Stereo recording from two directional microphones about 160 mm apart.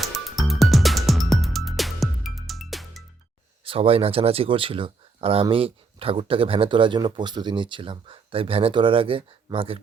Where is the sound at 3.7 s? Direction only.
35° right (ahead or behind).